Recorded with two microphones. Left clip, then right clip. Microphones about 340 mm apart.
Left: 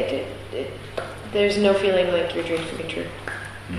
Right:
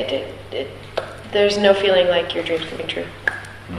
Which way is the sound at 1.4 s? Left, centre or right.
Right.